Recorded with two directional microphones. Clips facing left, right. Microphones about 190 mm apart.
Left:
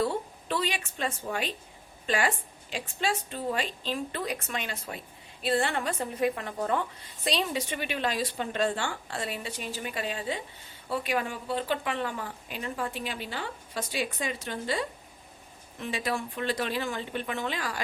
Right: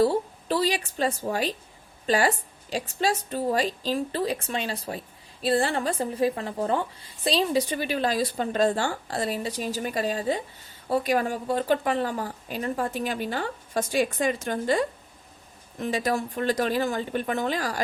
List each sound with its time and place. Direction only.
0.0 s a woman's voice: 35° right (ahead or behind)